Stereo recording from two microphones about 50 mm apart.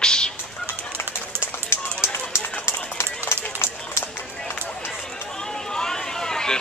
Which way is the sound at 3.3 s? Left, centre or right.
Left.